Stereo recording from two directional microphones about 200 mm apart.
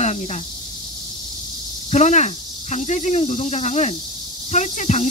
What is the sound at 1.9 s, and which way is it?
Speech, 35° left (ahead or behind).